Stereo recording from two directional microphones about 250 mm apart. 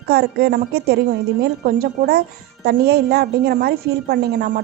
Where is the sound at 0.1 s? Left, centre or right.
Right.